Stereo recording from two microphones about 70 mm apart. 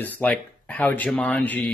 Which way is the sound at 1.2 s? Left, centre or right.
Centre.